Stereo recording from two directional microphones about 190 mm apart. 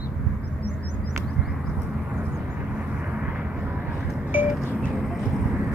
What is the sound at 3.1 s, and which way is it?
Vehicle, 5° right (ahead or behind).